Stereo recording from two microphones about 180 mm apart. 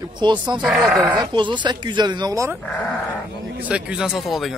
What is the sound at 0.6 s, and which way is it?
Speech, 5° right (ahead or behind).